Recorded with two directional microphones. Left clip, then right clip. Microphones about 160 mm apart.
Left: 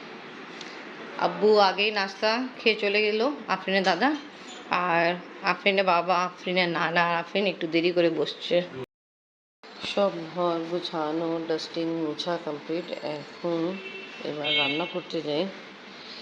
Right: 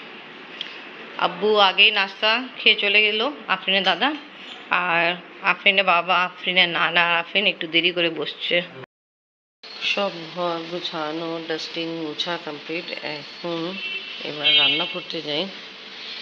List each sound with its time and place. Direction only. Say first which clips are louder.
1.1 s a man's voice: right 2 dB; 10° left (ahead or behind)
10.0 s speech: even; 15° right (ahead or behind)
11.5 s speech: right 1 dB; 10° left (ahead or behind)
13.4 s speech: right 1 dB; 15° right (ahead or behind)
15.0 s speech: right 2 dB; 15° left (ahead or behind)